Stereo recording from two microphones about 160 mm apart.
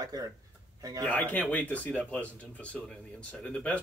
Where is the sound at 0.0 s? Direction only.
20° right (ahead or behind).